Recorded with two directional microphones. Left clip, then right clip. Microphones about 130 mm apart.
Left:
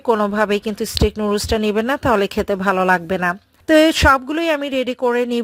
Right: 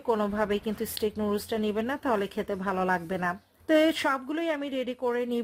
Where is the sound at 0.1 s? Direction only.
45° left (ahead or behind).